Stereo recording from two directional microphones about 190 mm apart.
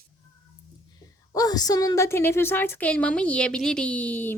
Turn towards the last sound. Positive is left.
turn(degrees=10)  # may be behind; listen again after turning